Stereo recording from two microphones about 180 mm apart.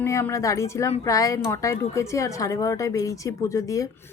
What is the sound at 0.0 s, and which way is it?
Speech, 15° left (ahead or behind).